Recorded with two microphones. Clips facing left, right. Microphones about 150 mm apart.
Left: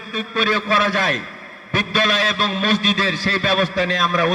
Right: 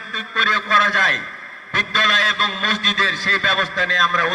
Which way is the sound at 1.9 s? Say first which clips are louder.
Left 3 dB; 10° left (ahead or behind).